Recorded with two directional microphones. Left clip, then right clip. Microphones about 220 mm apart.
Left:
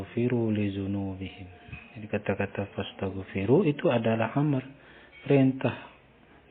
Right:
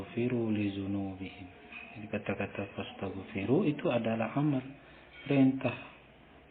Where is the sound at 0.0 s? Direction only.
30° left (ahead or behind).